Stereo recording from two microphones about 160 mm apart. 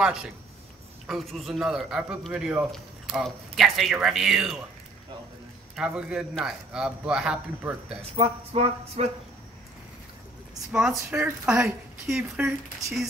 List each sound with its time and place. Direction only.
0.0 s a man's voice: 5° right (ahead or behind)
5.8 s a man's voice: 5° right (ahead or behind)
8.2 s a sound: 40° right (ahead or behind)
10.7 s a man's voice: 5° right (ahead or behind)